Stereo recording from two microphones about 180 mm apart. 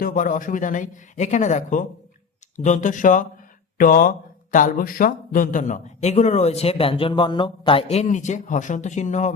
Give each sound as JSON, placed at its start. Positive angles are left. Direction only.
{"t": 0.0, "sound": "speech", "side_deg": 45}